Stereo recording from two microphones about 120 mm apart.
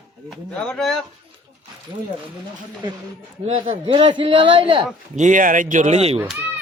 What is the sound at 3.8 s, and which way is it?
A man's voice, 45° right (ahead or behind).